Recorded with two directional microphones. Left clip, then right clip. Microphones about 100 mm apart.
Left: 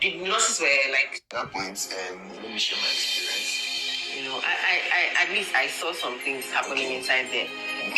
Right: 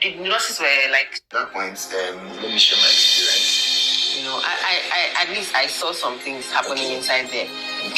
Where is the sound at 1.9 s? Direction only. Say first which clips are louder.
Right 8 dB; 60° right (ahead or behind).